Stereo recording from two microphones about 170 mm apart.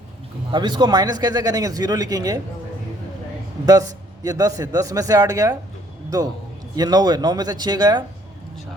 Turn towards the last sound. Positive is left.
turn(degrees=-25)  # may be behind; listen again after turning